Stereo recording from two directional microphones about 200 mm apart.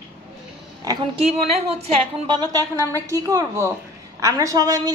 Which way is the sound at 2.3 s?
20° right (ahead or behind).